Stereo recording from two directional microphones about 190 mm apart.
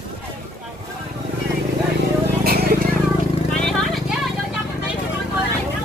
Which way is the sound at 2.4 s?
55° right (ahead or behind).